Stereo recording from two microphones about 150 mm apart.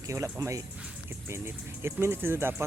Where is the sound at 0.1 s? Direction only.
20° right (ahead or behind).